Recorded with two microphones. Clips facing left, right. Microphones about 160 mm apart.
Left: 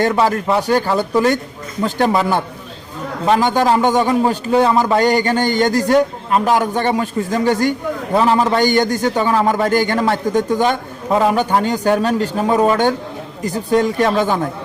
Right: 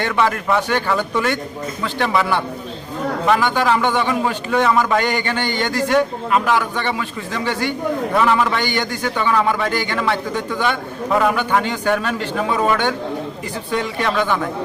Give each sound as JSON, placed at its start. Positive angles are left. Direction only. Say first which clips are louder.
{"t": 0.0, "sound": "a man's voice", "louder": "left 4 dB", "side_deg": 35}